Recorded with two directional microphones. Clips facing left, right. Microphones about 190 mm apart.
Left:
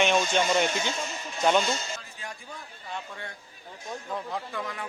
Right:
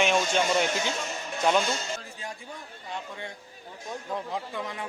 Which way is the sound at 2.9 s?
15° right (ahead or behind).